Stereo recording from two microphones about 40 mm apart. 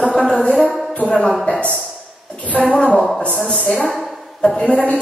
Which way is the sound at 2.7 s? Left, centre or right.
Left.